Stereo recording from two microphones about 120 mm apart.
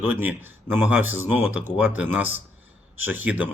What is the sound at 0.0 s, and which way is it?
Speech, 15° right (ahead or behind).